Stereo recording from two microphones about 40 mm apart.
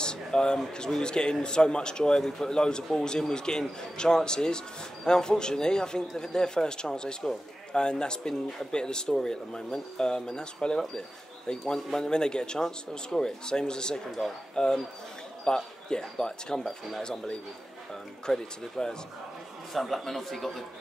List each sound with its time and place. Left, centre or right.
0.0 s a sound: centre
0.7 s speech: centre
2.2 s speech: centre
2.5 s speech: centre
19.7 s speech: centre